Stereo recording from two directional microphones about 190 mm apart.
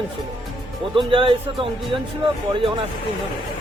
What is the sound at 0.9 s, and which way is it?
Speech, 25° right (ahead or behind).